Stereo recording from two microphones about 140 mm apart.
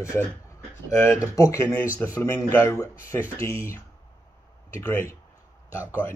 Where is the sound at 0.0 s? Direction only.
20° left (ahead or behind).